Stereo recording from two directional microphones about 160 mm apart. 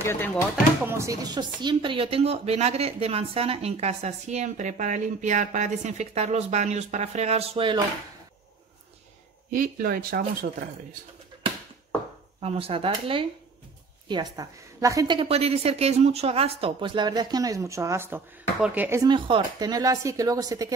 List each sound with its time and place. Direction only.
0.0 s speech: 15° left (ahead or behind)
0.8 s speech: 20° right (ahead or behind)
9.5 s speech: 60° right (ahead or behind)
12.4 s speech: 35° right (ahead or behind); by 15.1 s 20° right (ahead or behind)
15.1 s speech: 40° right (ahead or behind); by 19.0 s 15° right (ahead or behind)
19.0 s speech: 30° right (ahead or behind)